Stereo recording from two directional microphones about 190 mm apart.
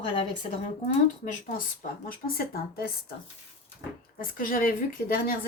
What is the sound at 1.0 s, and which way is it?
Speech, 45° left (ahead or behind).